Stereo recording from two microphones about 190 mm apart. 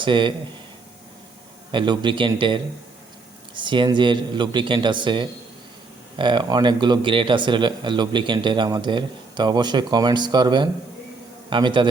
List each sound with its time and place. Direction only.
0.0 s speech: 25° right (ahead or behind)
1.7 s a man's voice: 25° right (ahead or behind)